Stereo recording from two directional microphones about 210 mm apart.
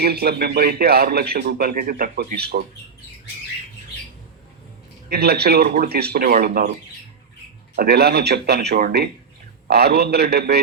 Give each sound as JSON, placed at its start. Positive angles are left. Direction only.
{"t": 0.0, "sound": "a man's voice", "side_deg": -50}
{"t": 5.0, "sound": "a man's voice", "side_deg": -50}
{"t": 7.8, "sound": "a man's voice", "side_deg": -50}